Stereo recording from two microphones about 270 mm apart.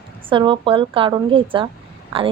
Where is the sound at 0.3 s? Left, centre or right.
Centre.